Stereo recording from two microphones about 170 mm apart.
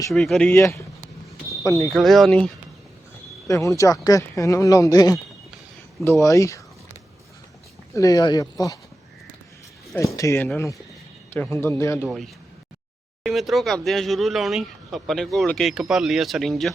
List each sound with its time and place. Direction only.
0.1 s speech: centre (ahead or behind)
0.5 s speech: 15° left (ahead or behind)
1.9 s speech: centre (ahead or behind)
3.4 s speech: 20° left (ahead or behind)
7.9 s speech: 20° left (ahead or behind)
10.0 s speech: 20° left (ahead or behind)
12.0 s speech: centre (ahead or behind)